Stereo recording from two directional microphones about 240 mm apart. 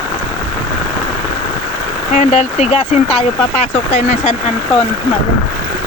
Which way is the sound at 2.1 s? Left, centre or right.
Left.